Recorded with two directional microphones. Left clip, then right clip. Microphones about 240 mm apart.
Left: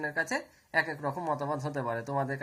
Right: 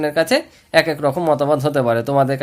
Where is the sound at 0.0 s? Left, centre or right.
Right.